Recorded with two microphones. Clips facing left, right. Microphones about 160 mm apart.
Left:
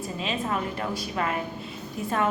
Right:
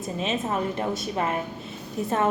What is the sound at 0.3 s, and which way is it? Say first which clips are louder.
A woman's voice: right 2 dB; 20° right (ahead or behind).